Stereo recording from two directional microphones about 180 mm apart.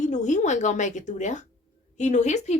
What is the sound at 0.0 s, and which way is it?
A woman's voice, 40° left (ahead or behind).